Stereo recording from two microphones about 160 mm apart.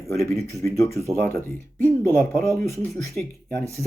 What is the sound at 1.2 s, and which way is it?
Speech, 15° left (ahead or behind).